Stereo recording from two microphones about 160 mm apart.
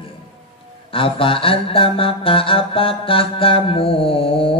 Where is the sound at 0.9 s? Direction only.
35° left (ahead or behind).